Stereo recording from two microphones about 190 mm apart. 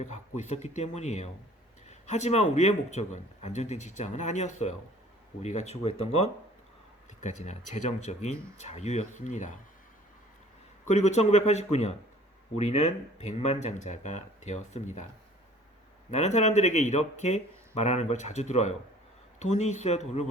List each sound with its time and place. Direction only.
0.0 s speech: 40° left (ahead or behind)
10.8 s speech: 35° left (ahead or behind)
16.1 s speech: 35° left (ahead or behind)